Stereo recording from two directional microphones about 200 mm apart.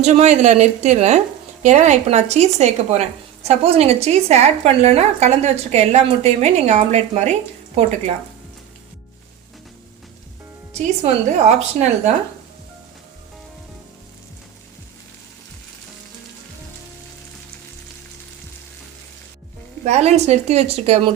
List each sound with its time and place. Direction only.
0.0 s a woman's voice: 35° right (ahead or behind)
11.0 s a woman's voice: 35° right (ahead or behind)
19.8 s a woman's voice: 35° right (ahead or behind)